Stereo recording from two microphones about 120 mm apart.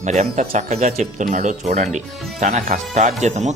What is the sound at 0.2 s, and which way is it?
Speech, 80° right.